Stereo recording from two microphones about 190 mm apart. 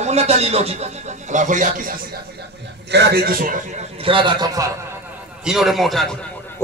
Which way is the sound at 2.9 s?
60° right (ahead or behind).